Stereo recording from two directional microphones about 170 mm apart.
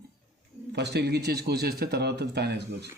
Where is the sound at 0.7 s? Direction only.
75° right (ahead or behind).